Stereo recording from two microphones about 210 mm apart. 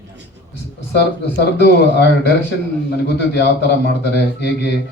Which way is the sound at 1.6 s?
55° left (ahead or behind).